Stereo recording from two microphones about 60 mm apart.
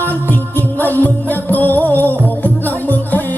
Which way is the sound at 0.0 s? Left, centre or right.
Left.